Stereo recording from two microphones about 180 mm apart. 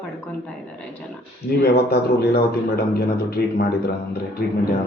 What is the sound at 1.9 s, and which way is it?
A man's voice, 60° left (ahead or behind).